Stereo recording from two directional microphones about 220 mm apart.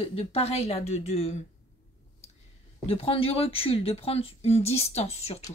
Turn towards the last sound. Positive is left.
turn(degrees=30)  # may be behind; listen again after turning